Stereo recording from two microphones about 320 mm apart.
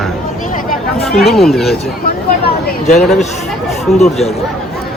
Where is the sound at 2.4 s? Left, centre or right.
Left.